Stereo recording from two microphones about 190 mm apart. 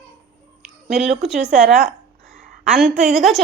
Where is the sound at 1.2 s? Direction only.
5° right (ahead or behind).